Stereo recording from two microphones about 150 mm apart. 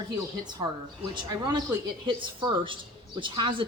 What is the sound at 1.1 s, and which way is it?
Speech, 30° right (ahead or behind).